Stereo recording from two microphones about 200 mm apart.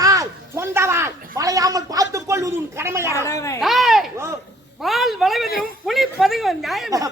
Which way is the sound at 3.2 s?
15° left (ahead or behind).